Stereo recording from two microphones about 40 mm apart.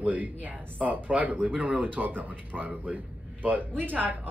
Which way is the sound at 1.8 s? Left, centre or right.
Right.